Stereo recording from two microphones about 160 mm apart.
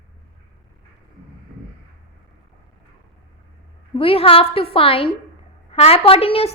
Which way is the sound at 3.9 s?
35° left (ahead or behind).